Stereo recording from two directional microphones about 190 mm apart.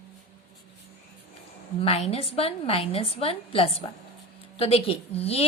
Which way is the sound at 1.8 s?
30° left (ahead or behind).